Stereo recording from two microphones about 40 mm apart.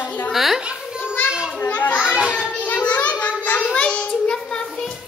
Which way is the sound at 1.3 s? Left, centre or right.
Right.